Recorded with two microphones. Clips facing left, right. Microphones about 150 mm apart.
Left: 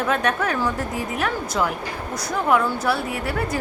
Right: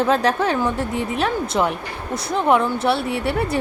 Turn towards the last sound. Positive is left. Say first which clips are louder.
# right 4 dB
turn(degrees=-25)  # may be behind; listen again after turning